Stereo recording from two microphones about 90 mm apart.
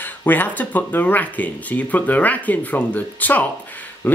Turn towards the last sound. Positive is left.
turn(degrees=20)  # may be behind; listen again after turning